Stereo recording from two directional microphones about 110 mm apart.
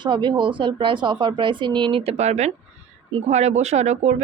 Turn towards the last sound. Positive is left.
turn(degrees=-85)